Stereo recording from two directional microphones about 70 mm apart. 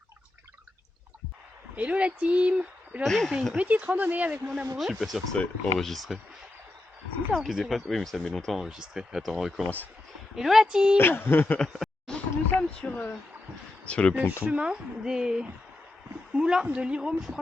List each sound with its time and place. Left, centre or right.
1.7 s speech: centre
3.0 s speech: centre
3.5 s speech: centre
4.8 s speech: centre
7.3 s speech: centre
8.5 s a woman's voice: centre
10.9 s speech: left
12.0 s speech: centre
14.4 s a woman's voice: centre